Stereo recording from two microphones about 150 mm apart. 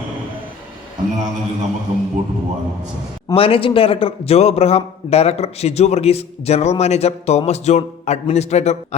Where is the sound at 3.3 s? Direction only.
40° left (ahead or behind).